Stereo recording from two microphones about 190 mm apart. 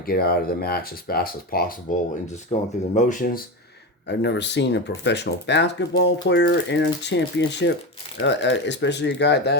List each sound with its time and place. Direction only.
0.0 s speech: 55° left (ahead or behind)
2.2 s speech: 40° left (ahead or behind)
4.0 s speech: 65° left (ahead or behind)